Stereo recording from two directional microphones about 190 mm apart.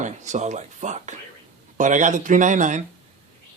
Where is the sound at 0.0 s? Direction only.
40° right (ahead or behind).